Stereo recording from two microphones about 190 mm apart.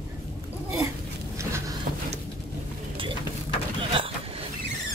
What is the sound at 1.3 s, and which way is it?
Vehicle, 15° right (ahead or behind).